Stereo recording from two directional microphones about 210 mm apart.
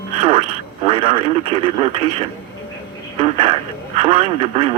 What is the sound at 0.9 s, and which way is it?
Speech, 25° right (ahead or behind).